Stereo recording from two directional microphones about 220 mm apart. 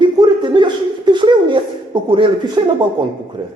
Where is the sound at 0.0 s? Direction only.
20° right (ahead or behind).